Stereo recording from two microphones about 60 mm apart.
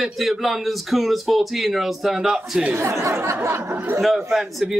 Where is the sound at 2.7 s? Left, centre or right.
Right.